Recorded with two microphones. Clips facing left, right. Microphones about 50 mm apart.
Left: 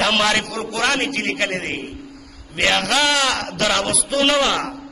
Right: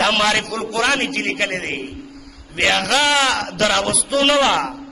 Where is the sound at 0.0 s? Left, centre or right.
Centre.